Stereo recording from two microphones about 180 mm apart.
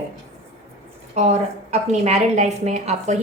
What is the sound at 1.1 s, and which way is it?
A woman's voice, 35° right (ahead or behind).